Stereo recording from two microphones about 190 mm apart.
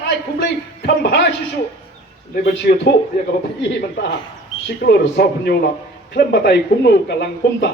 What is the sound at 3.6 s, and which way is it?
Speech, 60° left (ahead or behind).